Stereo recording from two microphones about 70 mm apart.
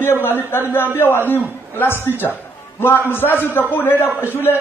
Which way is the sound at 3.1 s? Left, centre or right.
Left.